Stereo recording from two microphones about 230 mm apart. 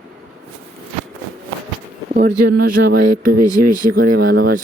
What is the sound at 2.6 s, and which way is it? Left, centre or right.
Speech, right.